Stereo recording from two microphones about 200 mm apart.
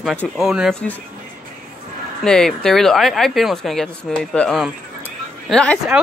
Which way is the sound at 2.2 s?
5° left (ahead or behind).